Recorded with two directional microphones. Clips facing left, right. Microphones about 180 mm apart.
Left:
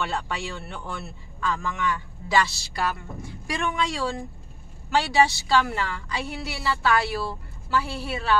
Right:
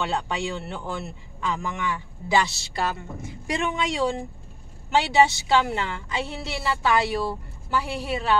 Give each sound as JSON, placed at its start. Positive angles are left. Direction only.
{"t": 0.0, "sound": "a woman's voice", "side_deg": -20}